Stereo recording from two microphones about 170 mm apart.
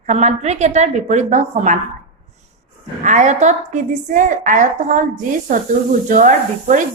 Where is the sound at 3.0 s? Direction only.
45° right (ahead or behind).